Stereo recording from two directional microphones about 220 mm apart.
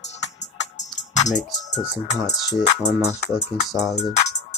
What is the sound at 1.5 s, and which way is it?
Speech, 35° left (ahead or behind).